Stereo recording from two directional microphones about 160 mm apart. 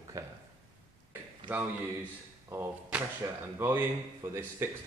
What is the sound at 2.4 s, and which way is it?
Speech, 15° right (ahead or behind).